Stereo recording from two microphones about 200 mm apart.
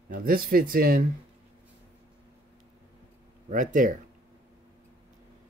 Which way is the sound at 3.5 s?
40° right (ahead or behind).